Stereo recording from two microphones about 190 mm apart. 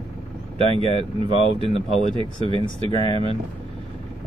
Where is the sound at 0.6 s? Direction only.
30° right (ahead or behind).